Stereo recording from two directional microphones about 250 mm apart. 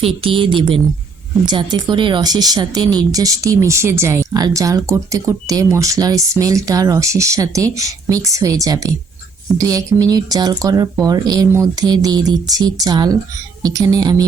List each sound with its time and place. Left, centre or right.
0.0 s a woman's voice: right